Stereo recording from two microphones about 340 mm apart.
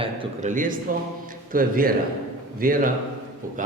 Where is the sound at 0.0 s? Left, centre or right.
Centre.